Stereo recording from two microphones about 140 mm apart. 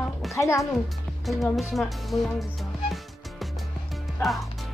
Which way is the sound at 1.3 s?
Centre (ahead or behind).